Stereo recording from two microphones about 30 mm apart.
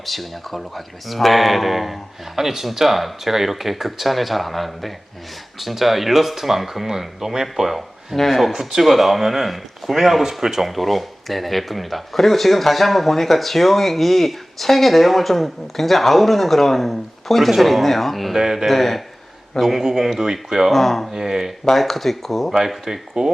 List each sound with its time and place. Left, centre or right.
0.0 s speech: centre
8.1 s speech: centre
8.5 s speech: centre
10.7 s speech: centre
18.3 s speech: centre
18.7 s speech: centre
19.8 s speech: centre
20.7 s speech: centre
21.1 s speech: centre
21.8 s speech: centre
22.5 s speech: centre